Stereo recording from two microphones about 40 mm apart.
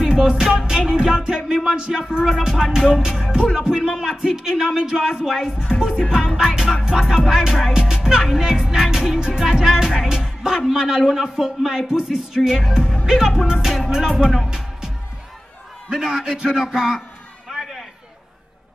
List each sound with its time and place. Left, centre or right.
0.0 s music: centre
14.2 s speech: centre
15.9 s a man's voice: right
16.7 s music: centre
17.5 s a sound: centre